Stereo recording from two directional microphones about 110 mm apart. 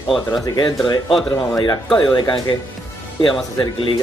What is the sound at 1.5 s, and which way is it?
Speech, 40° left (ahead or behind).